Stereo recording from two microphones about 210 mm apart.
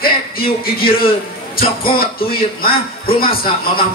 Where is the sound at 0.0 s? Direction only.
45° left (ahead or behind).